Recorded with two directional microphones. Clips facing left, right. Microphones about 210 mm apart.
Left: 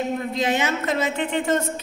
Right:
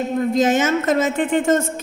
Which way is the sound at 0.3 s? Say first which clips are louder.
Right 9 dB; 45° right (ahead or behind).